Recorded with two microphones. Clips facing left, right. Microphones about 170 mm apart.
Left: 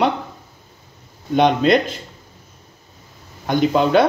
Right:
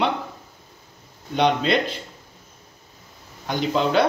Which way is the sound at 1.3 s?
45° left (ahead or behind).